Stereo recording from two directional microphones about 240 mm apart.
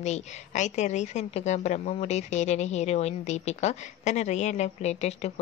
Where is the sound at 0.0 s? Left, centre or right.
Left.